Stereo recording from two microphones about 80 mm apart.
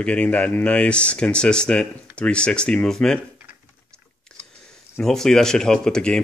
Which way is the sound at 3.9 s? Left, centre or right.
Centre.